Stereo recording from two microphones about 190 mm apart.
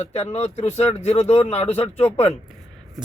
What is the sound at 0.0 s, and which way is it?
Speech, 35° left (ahead or behind).